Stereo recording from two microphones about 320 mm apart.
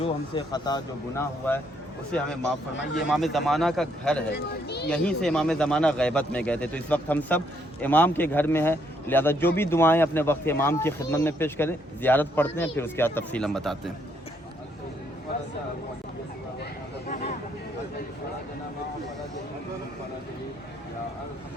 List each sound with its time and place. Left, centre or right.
0.0 s speech: centre
4.3 s speech: left
4.9 s speech: centre